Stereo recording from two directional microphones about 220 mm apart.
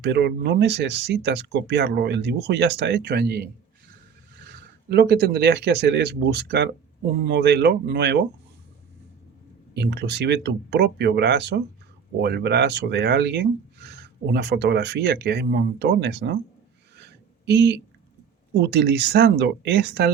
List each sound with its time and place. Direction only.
0.0 s speech: 50° right (ahead or behind)
9.7 s speech: 50° right (ahead or behind)
17.0 s a sound: 50° right (ahead or behind)
18.5 s speech: 50° right (ahead or behind)